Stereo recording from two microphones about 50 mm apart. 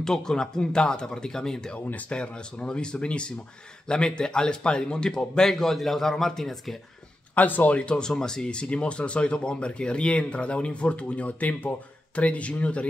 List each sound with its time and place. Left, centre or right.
0.0 s speech: centre
7.3 s speech: left
7.7 s speech: centre